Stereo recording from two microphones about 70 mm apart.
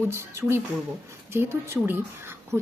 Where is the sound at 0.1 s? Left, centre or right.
Right.